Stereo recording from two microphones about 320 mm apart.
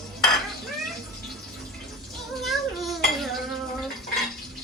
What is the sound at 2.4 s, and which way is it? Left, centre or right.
Dishes, centre.